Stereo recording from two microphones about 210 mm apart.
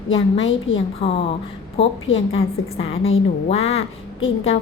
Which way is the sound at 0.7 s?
30° left (ahead or behind).